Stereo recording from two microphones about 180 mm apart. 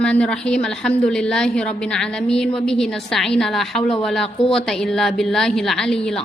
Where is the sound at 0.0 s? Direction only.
5° left (ahead or behind).